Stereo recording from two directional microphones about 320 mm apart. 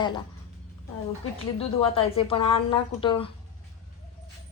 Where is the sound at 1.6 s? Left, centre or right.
Centre.